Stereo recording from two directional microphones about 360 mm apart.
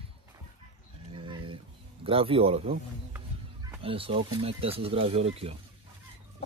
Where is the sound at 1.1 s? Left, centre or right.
Centre.